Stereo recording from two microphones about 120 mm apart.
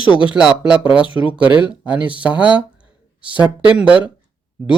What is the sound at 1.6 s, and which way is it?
Speech, 10° right (ahead or behind).